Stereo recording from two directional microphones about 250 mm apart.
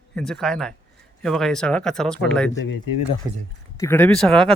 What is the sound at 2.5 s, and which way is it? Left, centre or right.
Speech, left.